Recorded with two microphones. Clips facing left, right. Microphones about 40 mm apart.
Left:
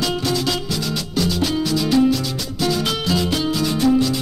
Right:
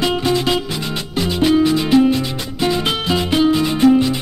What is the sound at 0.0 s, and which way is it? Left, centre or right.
Music, right.